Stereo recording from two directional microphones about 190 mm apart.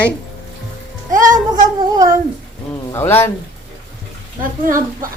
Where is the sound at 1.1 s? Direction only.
45° right (ahead or behind).